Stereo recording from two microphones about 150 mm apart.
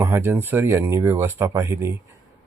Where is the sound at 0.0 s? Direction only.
15° right (ahead or behind).